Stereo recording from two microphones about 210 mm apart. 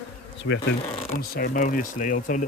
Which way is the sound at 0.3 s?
60° left (ahead or behind).